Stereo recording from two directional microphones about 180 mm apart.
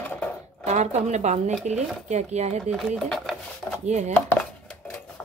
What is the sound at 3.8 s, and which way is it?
Speech, 40° right (ahead or behind).